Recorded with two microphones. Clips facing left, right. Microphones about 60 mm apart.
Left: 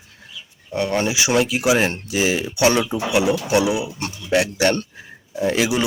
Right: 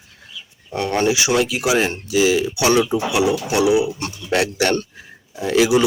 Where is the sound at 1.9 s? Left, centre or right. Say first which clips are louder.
Right 4 dB; left.